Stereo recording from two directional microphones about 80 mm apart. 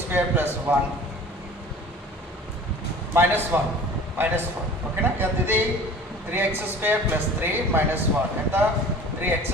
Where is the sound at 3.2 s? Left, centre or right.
Right.